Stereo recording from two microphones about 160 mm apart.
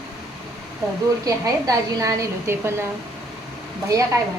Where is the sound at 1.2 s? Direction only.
20° right (ahead or behind).